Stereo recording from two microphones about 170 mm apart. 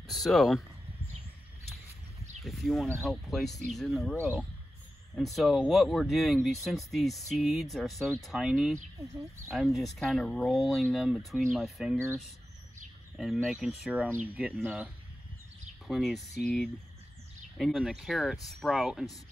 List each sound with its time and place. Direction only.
0.1 s speech: centre (ahead or behind)
2.4 s speech: centre (ahead or behind)
13.1 s speech: centre (ahead or behind)
15.9 s speech: centre (ahead or behind)